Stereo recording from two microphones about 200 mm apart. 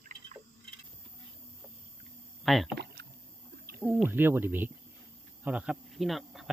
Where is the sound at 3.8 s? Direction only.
10° right (ahead or behind).